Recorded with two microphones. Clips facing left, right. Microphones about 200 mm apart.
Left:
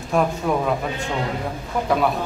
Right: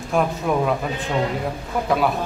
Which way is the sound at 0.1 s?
Centre (ahead or behind).